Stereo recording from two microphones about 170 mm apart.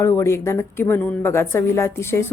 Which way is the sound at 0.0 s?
15° left (ahead or behind).